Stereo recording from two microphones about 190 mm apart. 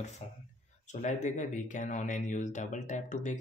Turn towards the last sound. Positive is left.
turn(degrees=40)  # may be behind; listen again after turning